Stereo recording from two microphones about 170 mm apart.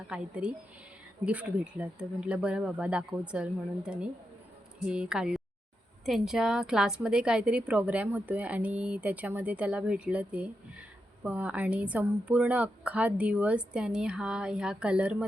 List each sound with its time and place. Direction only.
0.1 s a woman's voice: 5° right (ahead or behind)